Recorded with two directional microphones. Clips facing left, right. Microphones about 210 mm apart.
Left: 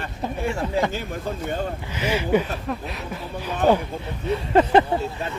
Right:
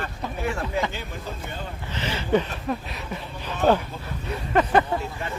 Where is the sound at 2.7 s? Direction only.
Centre (ahead or behind).